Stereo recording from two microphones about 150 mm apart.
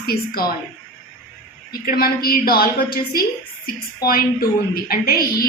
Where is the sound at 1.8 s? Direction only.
85° left.